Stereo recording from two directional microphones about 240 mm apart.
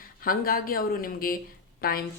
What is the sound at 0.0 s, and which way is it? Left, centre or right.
Speech, left.